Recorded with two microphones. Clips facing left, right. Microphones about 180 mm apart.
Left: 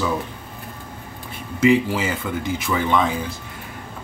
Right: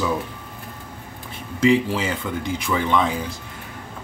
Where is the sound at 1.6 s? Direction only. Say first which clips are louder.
Left 1 dB; 5° left (ahead or behind).